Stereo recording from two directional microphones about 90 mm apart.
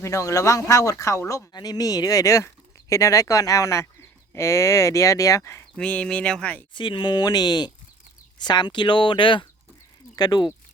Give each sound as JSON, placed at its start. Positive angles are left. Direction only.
{"t": 0.0, "sound": "speech", "side_deg": 35}
{"t": 1.5, "sound": "speech", "side_deg": 45}
{"t": 5.7, "sound": "speech", "side_deg": 15}
{"t": 6.7, "sound": "speech", "side_deg": 65}
{"t": 10.2, "sound": "speech", "side_deg": 50}